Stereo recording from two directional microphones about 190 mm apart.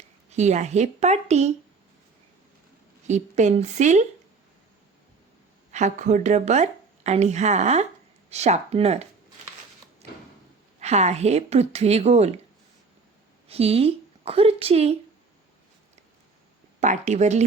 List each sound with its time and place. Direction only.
0.3 s speech: 35° right (ahead or behind)
3.1 s speech: 40° right (ahead or behind)
5.7 s speech: 40° right (ahead or behind)
10.8 s speech: 35° right (ahead or behind)
13.5 s a woman's voice: 30° right (ahead or behind)
16.8 s speech: 40° right (ahead or behind)